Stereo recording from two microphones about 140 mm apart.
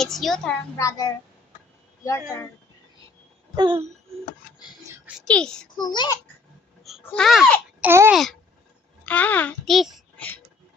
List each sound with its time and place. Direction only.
0.0 s speech: centre (ahead or behind)
0.8 s a child's voice: 25° left (ahead or behind)
3.5 s a sound: 35° right (ahead or behind)
5.2 s speech: 5° left (ahead or behind)
5.8 s a child's voice: 30° left (ahead or behind)
7.0 s speech: 5° left (ahead or behind)
7.8 s speech: 15° right (ahead or behind)
8.1 s a child's voice: centre (ahead or behind)
9.6 s a sound: centre (ahead or behind)